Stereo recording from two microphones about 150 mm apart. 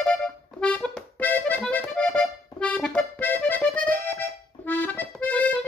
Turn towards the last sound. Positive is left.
turn(degrees=10)  # may be behind; listen again after turning